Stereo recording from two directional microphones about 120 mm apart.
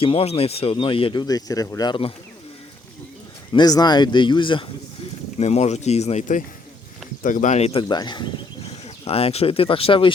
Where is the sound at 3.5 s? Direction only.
35° left (ahead or behind).